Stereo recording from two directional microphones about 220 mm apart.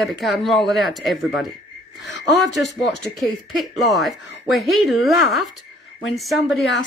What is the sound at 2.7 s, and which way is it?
Speech, centre (ahead or behind).